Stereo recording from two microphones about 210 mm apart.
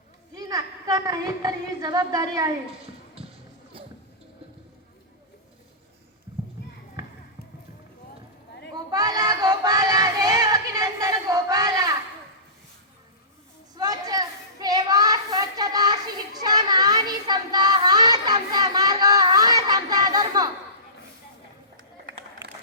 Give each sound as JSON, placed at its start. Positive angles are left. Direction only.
{"t": 0.3, "sound": "a woman's voice", "side_deg": -20}
{"t": 8.7, "sound": "music", "side_deg": -20}
{"t": 13.7, "sound": "a sound", "side_deg": -20}